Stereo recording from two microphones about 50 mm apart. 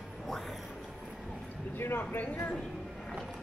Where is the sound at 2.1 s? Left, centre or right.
Left.